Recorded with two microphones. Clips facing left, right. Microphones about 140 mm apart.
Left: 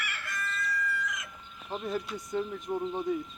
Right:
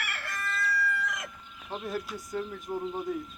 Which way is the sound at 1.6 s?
Centre (ahead or behind).